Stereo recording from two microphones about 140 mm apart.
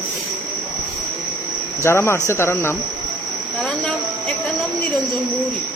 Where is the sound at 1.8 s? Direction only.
20° left (ahead or behind).